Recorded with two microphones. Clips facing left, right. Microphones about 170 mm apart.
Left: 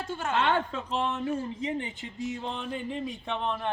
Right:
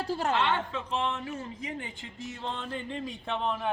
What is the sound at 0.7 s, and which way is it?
Speech, 40° left (ahead or behind).